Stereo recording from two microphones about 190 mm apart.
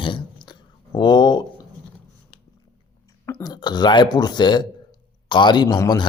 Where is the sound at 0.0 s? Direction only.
25° left (ahead or behind).